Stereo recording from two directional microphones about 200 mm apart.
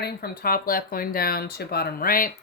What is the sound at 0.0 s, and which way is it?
Speech, 50° left (ahead or behind).